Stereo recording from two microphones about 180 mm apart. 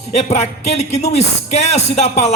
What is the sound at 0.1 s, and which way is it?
Speech, 40° left (ahead or behind).